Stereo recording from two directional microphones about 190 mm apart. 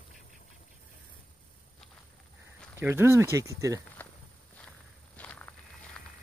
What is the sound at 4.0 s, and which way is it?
Walk, 10° left (ahead or behind).